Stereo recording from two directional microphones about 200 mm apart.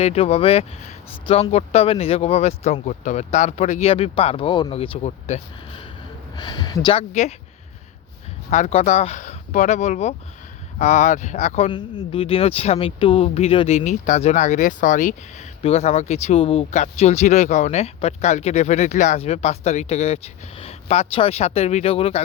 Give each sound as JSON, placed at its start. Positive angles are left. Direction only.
{"t": 0.0, "sound": "speech", "side_deg": 30}
{"t": 7.1, "sound": "speech", "side_deg": 35}
{"t": 8.4, "sound": "speech", "side_deg": 35}